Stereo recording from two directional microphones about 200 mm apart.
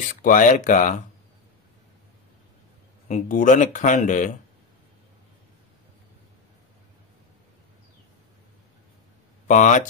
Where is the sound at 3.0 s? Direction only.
40° left (ahead or behind).